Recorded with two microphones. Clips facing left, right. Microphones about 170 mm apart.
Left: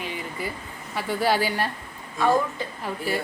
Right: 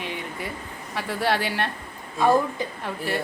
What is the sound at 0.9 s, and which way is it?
Speech, centre (ahead or behind).